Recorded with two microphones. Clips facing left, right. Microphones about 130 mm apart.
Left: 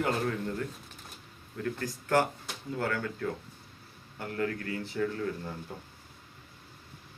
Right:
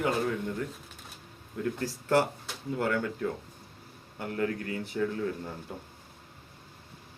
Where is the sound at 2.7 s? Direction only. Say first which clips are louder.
Right 3 dB; 15° right (ahead or behind).